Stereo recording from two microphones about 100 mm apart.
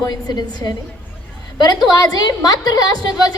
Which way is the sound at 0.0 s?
45° left (ahead or behind).